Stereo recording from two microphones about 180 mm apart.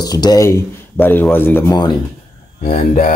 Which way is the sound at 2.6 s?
45° left (ahead or behind).